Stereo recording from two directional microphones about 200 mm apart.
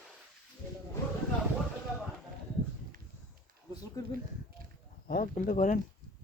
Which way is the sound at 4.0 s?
15° left (ahead or behind).